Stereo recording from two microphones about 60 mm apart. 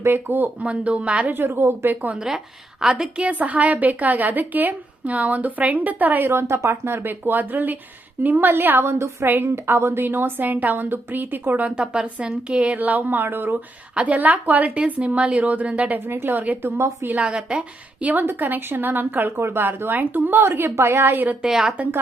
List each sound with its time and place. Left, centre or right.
0.0 s a woman's voice: right
1.3 s a woman's voice: right
2.1 s a woman's voice: centre; by 6.3 s right
6.3 s a woman's voice: right
13.9 s a woman's voice: right
16.0 s a woman's voice: right
16.4 s a woman's voice: right
16.7 s a woman's voice: right
17.2 s a woman's voice: centre
18.0 s a woman's voice: right
21.4 s a woman's voice: centre